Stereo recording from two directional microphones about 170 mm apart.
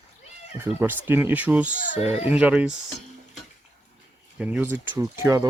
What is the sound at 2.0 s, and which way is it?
Speech, 35° left (ahead or behind).